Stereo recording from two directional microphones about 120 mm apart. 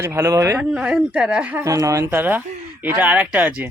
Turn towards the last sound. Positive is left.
turn(degrees=-15)  # may be behind; listen again after turning